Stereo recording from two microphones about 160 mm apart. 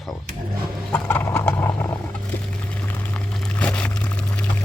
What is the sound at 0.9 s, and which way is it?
Horse, 10° left (ahead or behind).